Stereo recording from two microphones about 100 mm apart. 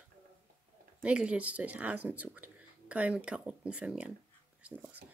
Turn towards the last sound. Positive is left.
turn(degrees=-10)  # may be behind; listen again after turning